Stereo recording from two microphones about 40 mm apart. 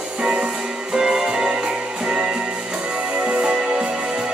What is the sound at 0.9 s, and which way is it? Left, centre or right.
Music, centre.